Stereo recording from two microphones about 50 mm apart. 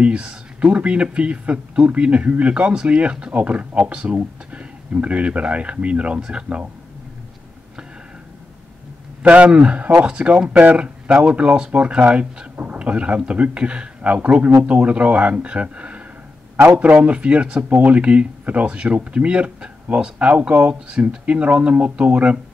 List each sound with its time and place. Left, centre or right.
0.0 s speech: right
9.2 s speech: right